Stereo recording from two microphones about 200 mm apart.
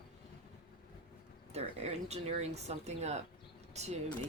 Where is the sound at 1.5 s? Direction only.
35° right (ahead or behind).